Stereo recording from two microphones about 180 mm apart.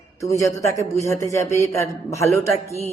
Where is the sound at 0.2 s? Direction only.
15° left (ahead or behind).